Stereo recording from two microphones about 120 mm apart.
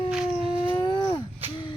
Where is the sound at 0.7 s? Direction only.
40° left (ahead or behind).